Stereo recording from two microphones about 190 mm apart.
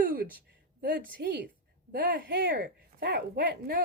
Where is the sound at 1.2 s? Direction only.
60° right (ahead or behind).